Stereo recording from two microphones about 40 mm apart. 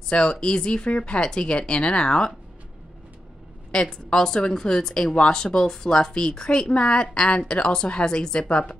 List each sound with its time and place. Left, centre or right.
0.1 s a woman's voice: left
3.9 s a woman's voice: centre